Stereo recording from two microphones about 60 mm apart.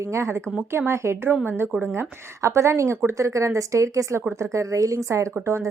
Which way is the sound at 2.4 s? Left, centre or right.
Right.